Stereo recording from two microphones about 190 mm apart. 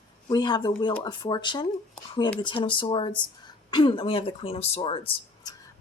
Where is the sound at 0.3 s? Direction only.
25° left (ahead or behind).